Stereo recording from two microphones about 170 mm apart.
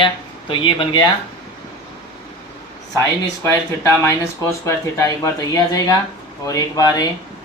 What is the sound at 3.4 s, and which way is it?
Speech, 15° left (ahead or behind).